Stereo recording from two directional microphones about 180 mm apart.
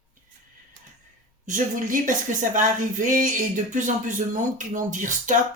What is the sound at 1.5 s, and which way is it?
Speech, 45° right (ahead or behind).